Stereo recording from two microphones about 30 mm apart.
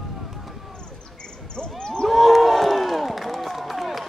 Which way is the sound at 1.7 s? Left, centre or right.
Left.